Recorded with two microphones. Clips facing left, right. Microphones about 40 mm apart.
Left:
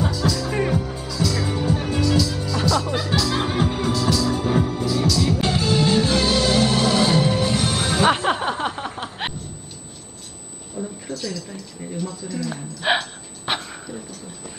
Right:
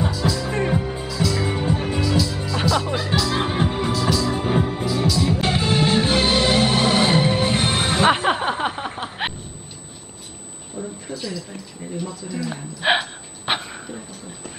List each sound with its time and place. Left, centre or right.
0.0 s music: centre
1.4 s music: right
2.0 s music: centre
3.3 s music: right
4.8 s music: centre
5.3 s music: right
8.0 s a sound: centre
10.8 s a sound: centre